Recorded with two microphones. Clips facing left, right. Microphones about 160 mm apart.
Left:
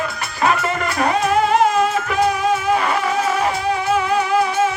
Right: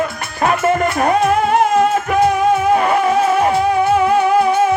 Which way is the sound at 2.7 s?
50° right (ahead or behind).